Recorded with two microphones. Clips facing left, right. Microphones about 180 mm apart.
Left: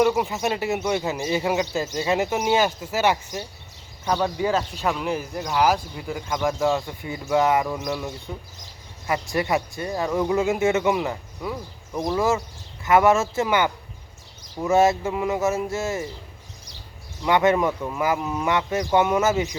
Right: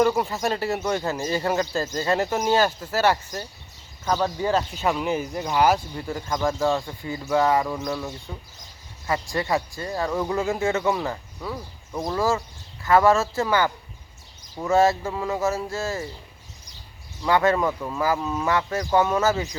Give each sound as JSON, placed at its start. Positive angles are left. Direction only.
{"t": 0.0, "sound": "speech", "side_deg": 5}
{"t": 4.5, "sound": "speech", "side_deg": 0}
{"t": 6.8, "sound": "speech", "side_deg": 20}
{"t": 9.0, "sound": "speech", "side_deg": 20}
{"t": 15.0, "sound": "speech", "side_deg": 15}
{"t": 17.2, "sound": "speech", "side_deg": 20}
{"t": 17.7, "sound": "speech", "side_deg": 5}
{"t": 18.0, "sound": "speech", "side_deg": 15}